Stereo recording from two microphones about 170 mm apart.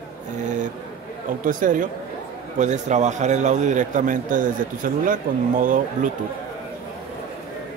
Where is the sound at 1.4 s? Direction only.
50° right (ahead or behind).